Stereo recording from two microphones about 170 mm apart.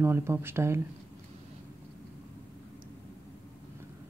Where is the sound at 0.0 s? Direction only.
15° right (ahead or behind).